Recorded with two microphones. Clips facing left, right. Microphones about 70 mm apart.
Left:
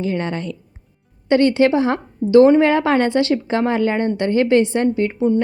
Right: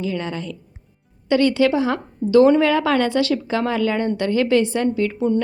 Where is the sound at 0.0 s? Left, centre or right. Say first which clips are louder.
Left 3 dB; left.